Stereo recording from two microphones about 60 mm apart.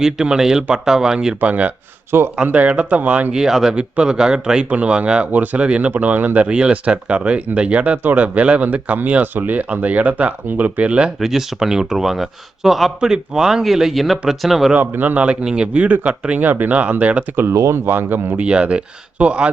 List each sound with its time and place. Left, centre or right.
0.0 s speech: centre
1.4 s speech: right
2.0 s speech: right
2.3 s speech: right
3.3 s speech: centre
5.9 s speech: right
11.2 s speech: centre
14.8 s speech: right
17.5 s speech: right
18.3 s speech: centre